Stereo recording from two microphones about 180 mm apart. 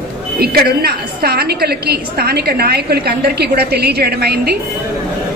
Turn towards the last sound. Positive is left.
turn(degrees=-60)  # may be behind; listen again after turning